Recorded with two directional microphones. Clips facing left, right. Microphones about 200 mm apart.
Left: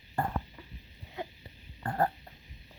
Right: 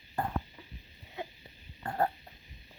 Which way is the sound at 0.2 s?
Centre (ahead or behind).